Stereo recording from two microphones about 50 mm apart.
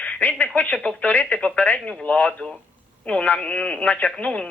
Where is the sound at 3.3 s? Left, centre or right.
Left.